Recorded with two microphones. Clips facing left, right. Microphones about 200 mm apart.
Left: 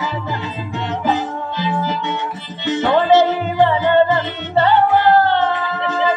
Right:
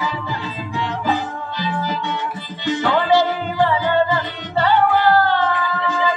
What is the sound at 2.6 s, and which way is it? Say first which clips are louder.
Music: left 3 dB; 20° left (ahead or behind).